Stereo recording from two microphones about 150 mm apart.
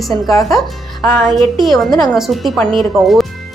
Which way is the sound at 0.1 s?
25° left (ahead or behind).